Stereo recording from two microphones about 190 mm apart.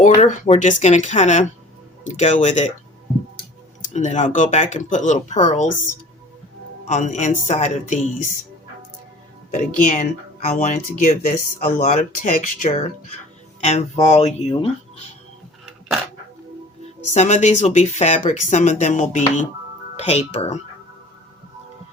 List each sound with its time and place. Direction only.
0.0 s speech: 40° left (ahead or behind)
3.9 s speech: 40° left (ahead or behind)
6.8 s speech: 40° left (ahead or behind)
9.5 s speech: 40° left (ahead or behind)
17.2 s speech: 40° left (ahead or behind)